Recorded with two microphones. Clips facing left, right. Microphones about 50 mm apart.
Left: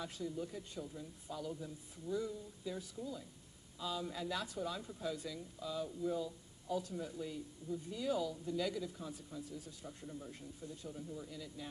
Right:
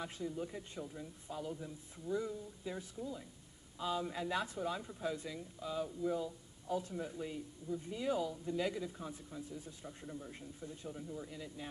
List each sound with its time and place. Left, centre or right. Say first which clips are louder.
0.0 s speech: right 1 dB; right